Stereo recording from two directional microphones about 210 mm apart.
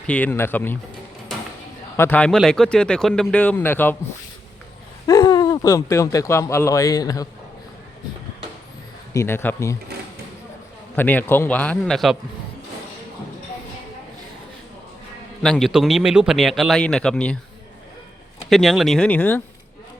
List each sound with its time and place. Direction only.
0.1 s speech: 10° left (ahead or behind)
2.0 s speech: 10° left (ahead or behind)
5.0 s speech: 20° left (ahead or behind)
9.1 s speech: 10° left (ahead or behind)
10.9 s speech: 10° left (ahead or behind)
15.4 s speech: centre (ahead or behind)
18.4 s speech: centre (ahead or behind)